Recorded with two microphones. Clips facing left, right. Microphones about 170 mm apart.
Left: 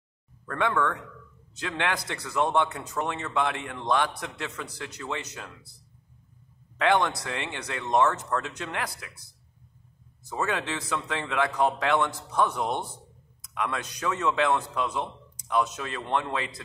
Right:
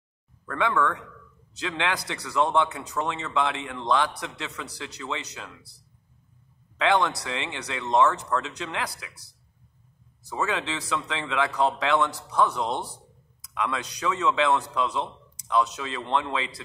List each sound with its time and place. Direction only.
0.5 s a man's voice: 50° left (ahead or behind)
6.8 s a man's voice: 50° left (ahead or behind)
12.5 s a man's voice: 15° left (ahead or behind)
13.4 s a man's voice: 50° left (ahead or behind)